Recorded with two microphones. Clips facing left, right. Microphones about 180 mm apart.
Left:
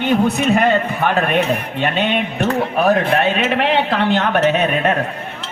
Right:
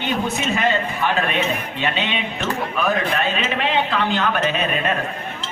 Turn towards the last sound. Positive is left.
turn(degrees=65)  # may be behind; listen again after turning